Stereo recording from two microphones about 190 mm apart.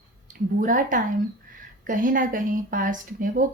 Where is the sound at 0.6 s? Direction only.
45° right (ahead or behind).